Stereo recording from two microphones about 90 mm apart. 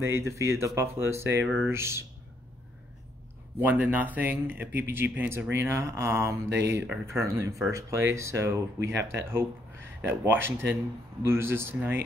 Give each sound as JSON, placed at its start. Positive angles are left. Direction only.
{"t": 0.0, "sound": "speech", "side_deg": -30}
{"t": 3.5, "sound": "speech", "side_deg": -20}